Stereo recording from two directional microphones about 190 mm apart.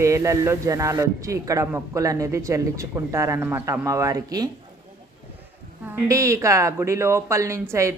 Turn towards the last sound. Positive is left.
turn(degrees=-15)  # may be behind; listen again after turning